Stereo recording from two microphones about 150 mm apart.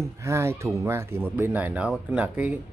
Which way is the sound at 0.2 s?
20° right (ahead or behind).